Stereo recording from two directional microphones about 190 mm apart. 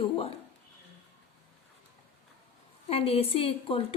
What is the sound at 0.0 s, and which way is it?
Speech, 30° left (ahead or behind).